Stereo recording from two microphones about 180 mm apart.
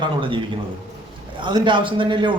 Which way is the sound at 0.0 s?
30° right (ahead or behind).